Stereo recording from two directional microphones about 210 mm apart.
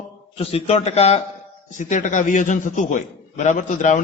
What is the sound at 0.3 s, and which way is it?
A man's voice, 30° left (ahead or behind).